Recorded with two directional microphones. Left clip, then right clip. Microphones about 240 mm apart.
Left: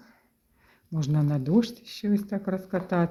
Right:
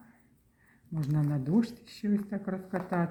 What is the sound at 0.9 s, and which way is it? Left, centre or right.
Speech, left.